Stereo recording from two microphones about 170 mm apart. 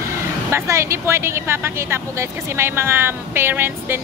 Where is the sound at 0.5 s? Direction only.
15° right (ahead or behind).